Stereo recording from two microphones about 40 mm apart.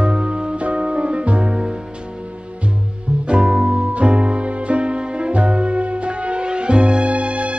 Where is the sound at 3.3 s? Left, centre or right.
Right.